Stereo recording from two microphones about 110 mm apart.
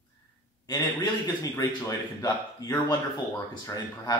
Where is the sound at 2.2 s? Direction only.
35° left (ahead or behind).